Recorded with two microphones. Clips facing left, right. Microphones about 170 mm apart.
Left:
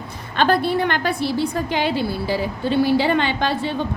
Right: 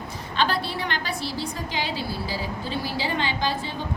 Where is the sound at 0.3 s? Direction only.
50° left (ahead or behind).